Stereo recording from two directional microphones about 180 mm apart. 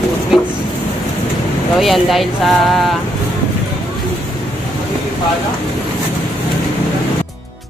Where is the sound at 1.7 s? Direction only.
Centre (ahead or behind).